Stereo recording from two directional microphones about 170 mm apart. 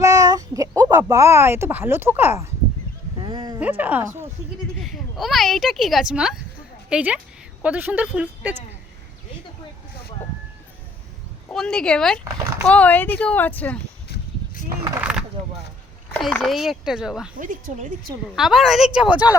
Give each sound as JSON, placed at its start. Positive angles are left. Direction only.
{"t": 0.0, "sound": "a child's voice", "side_deg": -20}
{"t": 3.2, "sound": "a sound", "side_deg": -25}
{"t": 3.6, "sound": "speech", "side_deg": -10}
{"t": 11.4, "sound": "speech", "side_deg": 5}
{"t": 16.1, "sound": "speech", "side_deg": 5}
{"t": 17.3, "sound": "speech", "side_deg": -50}
{"t": 18.3, "sound": "speech", "side_deg": 0}